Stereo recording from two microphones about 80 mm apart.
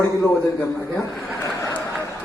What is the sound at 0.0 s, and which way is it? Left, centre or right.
Speech, left.